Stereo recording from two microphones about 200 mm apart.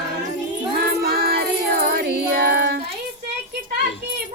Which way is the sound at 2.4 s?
50° right (ahead or behind).